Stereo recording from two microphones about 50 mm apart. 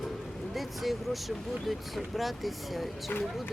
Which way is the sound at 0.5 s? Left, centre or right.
Centre.